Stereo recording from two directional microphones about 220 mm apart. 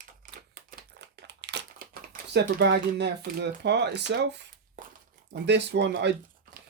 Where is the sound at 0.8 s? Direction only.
50° right (ahead or behind).